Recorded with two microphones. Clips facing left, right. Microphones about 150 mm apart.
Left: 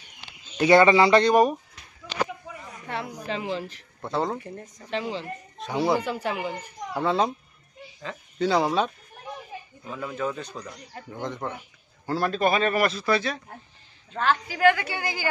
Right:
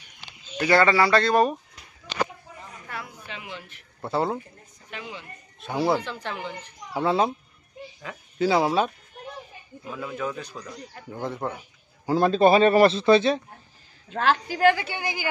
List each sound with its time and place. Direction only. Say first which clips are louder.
0.6 s speech: left 3 dB; 20° left (ahead or behind)
2.5 s a sound: left 4 dB; 70° left (ahead or behind)
3.1 s speech: left 9 dB; 35° left (ahead or behind)
4.0 s speech: right 2 dB; 5° right (ahead or behind)
4.8 s speech: left 9 dB; 30° left (ahead or behind)
5.6 s speech: even; centre (ahead or behind)
5.9 s speech: left 4 dB; 10° left (ahead or behind)
6.9 s speech: right 1 dB; 5° right (ahead or behind)
12.1 s speech: right 6 dB; 20° right (ahead or behind)
14.5 s speech: left 2 dB; 30° right (ahead or behind)